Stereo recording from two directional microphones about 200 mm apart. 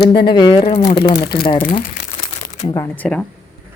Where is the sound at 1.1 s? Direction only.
55° left (ahead or behind).